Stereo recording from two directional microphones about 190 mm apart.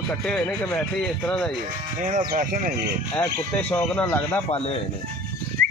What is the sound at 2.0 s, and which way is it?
Speech, 45° right (ahead or behind).